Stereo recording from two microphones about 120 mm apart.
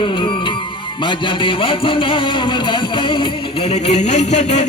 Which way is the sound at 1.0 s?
45° left (ahead or behind).